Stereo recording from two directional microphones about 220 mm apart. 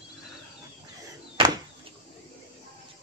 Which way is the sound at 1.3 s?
20° right (ahead or behind).